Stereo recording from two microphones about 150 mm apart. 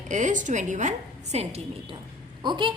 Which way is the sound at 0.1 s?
55° right (ahead or behind).